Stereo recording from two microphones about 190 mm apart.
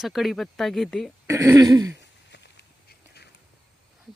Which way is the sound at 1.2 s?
15° right (ahead or behind).